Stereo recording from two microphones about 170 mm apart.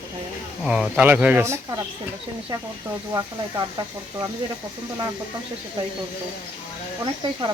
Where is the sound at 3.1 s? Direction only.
20° right (ahead or behind).